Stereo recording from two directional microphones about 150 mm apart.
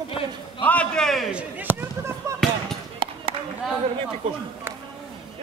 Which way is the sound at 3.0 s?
35° right (ahead or behind).